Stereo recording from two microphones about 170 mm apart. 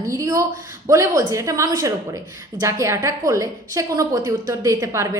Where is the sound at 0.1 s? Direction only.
20° right (ahead or behind).